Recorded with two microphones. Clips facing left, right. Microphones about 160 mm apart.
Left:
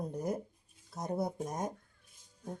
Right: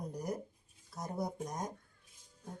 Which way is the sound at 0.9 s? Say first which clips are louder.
Left 4 dB; 20° left (ahead or behind).